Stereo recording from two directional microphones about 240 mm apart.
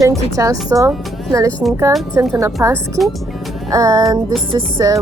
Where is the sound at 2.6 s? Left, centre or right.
Centre.